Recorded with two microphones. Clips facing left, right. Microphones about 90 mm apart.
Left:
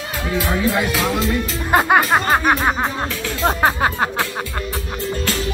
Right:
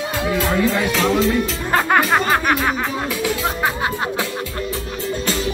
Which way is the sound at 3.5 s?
45° left (ahead or behind).